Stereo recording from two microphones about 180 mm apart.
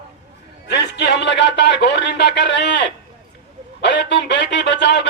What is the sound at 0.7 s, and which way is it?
A man's voice, 70° left (ahead or behind).